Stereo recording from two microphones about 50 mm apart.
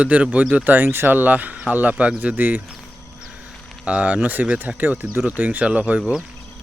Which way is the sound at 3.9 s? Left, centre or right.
Right.